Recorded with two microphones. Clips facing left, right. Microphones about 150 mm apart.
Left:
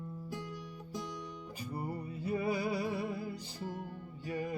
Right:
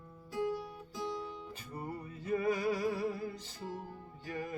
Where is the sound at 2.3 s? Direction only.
10° left (ahead or behind).